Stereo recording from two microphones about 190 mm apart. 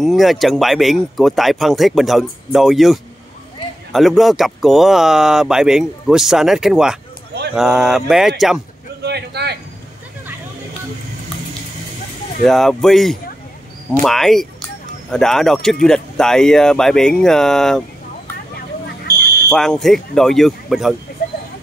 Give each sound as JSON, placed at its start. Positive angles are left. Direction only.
{"t": 0.0, "sound": "speech", "side_deg": 0}
{"t": 9.0, "sound": "a sound", "side_deg": -60}
{"t": 12.4, "sound": "speech", "side_deg": 0}
{"t": 19.5, "sound": "speech", "side_deg": 0}